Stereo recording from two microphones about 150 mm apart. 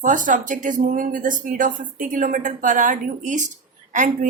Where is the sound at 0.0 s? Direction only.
60° right (ahead or behind).